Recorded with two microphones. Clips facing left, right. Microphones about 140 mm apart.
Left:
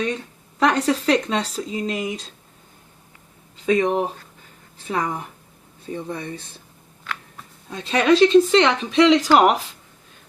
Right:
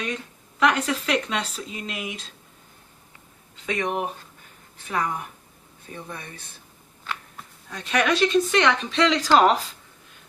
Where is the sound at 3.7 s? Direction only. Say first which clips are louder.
Left 7 dB; 30° left (ahead or behind).